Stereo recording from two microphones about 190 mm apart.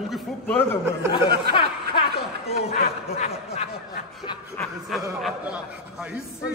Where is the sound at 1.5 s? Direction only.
55° right (ahead or behind).